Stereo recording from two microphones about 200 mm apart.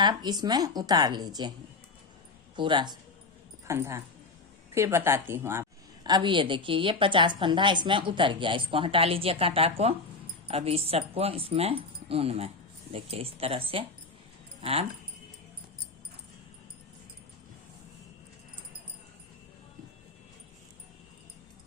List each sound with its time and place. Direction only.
0.0 s a woman's voice: 20° right (ahead or behind)
2.6 s a woman's voice: 25° right (ahead or behind)